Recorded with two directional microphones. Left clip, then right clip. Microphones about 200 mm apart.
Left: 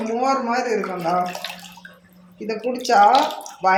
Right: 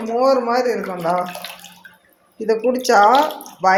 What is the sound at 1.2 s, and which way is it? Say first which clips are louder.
Speech: left 1 dB; centre (ahead or behind).